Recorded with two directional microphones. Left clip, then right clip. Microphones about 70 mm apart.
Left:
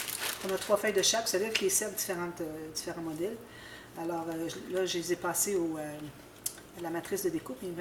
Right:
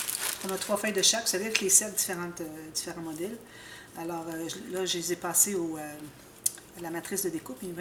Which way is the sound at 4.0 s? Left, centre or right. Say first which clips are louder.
Left 1 dB; right.